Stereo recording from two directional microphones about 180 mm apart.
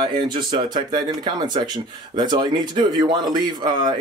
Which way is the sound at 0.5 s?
25° right (ahead or behind).